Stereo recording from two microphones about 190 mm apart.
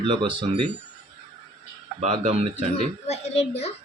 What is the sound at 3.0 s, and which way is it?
Speech, 35° left (ahead or behind).